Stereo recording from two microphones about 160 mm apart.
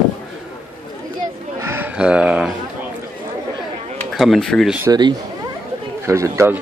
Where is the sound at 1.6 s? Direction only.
15° right (ahead or behind).